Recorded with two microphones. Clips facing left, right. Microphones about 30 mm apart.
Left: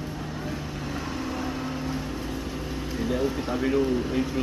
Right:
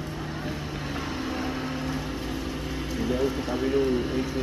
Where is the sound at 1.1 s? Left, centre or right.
Centre.